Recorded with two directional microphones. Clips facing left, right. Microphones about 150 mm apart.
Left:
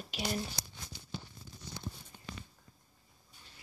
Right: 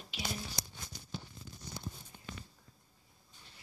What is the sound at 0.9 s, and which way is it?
Tearing, 40° right (ahead or behind).